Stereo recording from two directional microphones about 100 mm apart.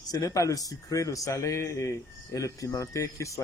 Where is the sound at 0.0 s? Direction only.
40° left (ahead or behind).